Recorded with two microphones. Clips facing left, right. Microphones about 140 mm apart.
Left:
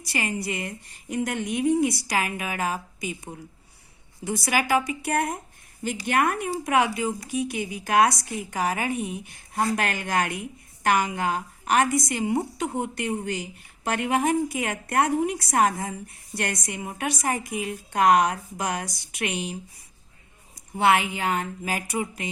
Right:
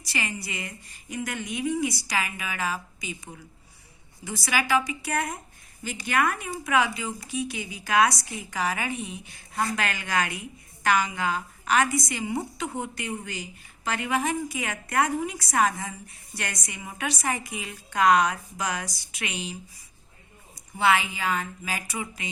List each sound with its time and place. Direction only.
0.0 s a woman's voice: 50° left (ahead or behind)
4.4 s a woman's voice: 50° left (ahead or behind)
20.7 s speech: 55° left (ahead or behind)